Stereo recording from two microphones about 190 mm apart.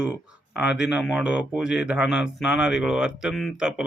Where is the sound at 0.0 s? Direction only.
5° right (ahead or behind).